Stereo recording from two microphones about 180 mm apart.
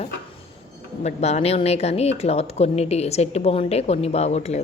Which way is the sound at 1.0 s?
35° left (ahead or behind).